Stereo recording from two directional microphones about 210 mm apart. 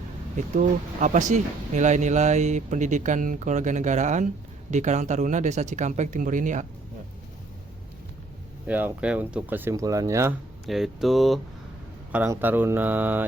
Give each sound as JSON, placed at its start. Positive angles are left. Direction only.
{"t": 0.3, "sound": "speech", "side_deg": -35}
{"t": 8.6, "sound": "speech", "side_deg": -5}
{"t": 10.7, "sound": "speech", "side_deg": 0}